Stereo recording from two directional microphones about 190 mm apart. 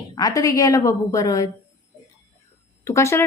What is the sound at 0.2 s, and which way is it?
Speech, 20° left (ahead or behind).